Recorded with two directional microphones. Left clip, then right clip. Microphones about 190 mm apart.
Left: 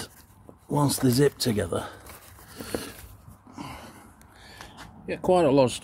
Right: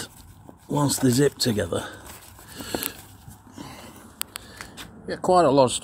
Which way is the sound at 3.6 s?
20° left (ahead or behind).